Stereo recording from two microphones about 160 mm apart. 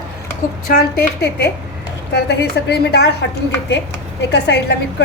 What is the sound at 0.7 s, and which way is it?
Speech, 65° left (ahead or behind).